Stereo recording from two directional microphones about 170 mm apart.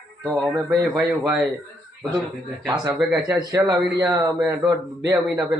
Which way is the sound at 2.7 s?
20° right (ahead or behind).